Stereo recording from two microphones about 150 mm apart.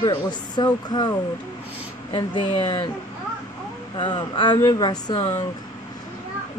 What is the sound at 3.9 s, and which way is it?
Speech, 30° left (ahead or behind).